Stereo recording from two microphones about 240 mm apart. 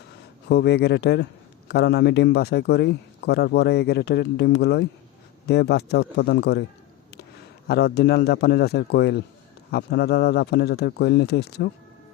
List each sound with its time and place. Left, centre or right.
0.4 s a man's voice: left
7.7 s a man's voice: left